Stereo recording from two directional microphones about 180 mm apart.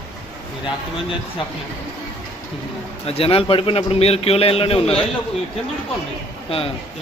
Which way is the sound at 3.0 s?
30° left (ahead or behind).